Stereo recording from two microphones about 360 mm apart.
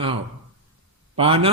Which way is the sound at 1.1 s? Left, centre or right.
Centre.